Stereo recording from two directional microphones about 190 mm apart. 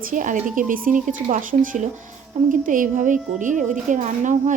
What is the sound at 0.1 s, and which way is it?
A woman's voice, 45° right (ahead or behind).